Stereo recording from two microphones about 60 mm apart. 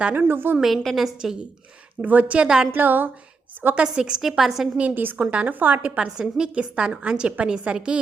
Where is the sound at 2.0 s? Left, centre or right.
Right.